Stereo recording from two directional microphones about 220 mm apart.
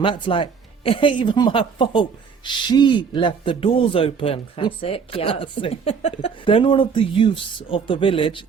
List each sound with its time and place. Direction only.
0.0 s a woman's voice: 25° left (ahead or behind)